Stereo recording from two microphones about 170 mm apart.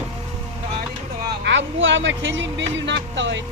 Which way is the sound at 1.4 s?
90° right.